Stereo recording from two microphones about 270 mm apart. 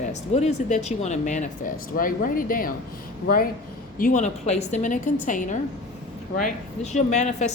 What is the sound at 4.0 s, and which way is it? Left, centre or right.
Speech, left.